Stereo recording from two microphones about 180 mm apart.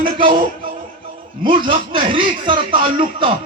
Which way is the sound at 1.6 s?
25° right (ahead or behind).